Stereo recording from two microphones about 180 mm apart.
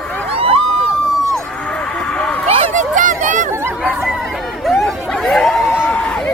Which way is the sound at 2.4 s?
35° right (ahead or behind).